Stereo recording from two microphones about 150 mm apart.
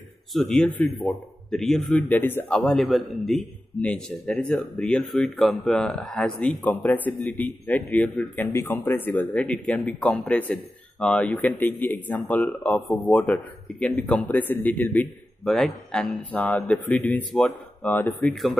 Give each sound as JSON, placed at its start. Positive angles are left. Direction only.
{"t": 0.3, "sound": "a man's voice", "side_deg": 5}